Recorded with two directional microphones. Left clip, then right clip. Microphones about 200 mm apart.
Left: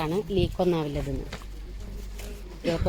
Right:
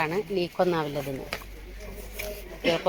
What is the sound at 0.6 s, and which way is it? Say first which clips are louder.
Speech: right 1 dB; 5° left (ahead or behind).